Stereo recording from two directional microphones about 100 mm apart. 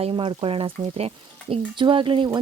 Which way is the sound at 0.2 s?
60° right (ahead or behind).